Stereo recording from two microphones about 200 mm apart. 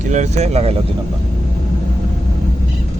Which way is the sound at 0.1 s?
35° right (ahead or behind).